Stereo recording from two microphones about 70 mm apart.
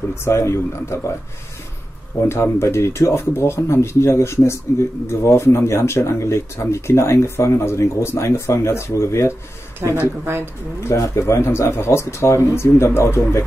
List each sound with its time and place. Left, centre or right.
0.1 s speech: left
2.2 s speech: left
10.2 s speech: right
11.0 s speech: left